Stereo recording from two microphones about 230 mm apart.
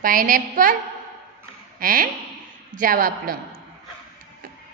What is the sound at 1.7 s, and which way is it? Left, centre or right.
A woman's voice, right.